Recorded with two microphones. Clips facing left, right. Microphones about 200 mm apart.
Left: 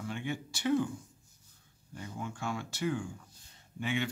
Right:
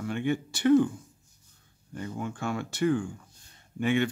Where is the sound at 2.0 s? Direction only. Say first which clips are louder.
Right 6 dB; 60° right (ahead or behind).